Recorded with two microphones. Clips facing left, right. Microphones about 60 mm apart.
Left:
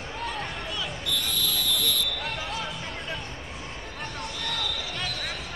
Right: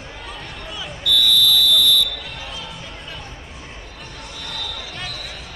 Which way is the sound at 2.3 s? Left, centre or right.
Left.